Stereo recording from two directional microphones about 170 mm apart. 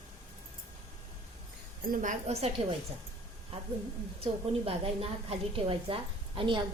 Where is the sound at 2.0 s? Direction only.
40° right (ahead or behind).